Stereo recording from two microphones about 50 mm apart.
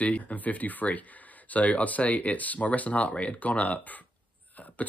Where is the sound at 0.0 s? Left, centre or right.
Left.